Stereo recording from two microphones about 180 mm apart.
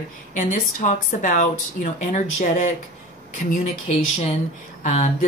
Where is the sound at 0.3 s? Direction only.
45° left (ahead or behind).